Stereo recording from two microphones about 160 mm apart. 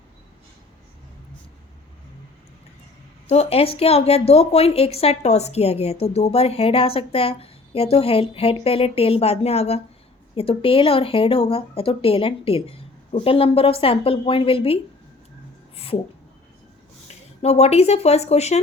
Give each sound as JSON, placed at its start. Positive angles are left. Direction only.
{"t": 3.2, "sound": "a woman's voice", "side_deg": 40}
{"t": 17.4, "sound": "a woman's voice", "side_deg": 40}